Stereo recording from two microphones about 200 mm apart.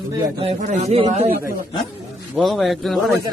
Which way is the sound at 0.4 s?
35° right (ahead or behind).